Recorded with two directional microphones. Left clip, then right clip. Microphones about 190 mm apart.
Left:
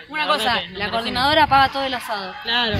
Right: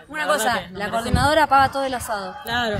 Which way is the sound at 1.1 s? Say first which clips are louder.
Left 1 dB; 20° right (ahead or behind).